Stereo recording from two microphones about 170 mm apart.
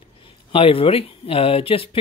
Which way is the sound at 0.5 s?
35° left (ahead or behind).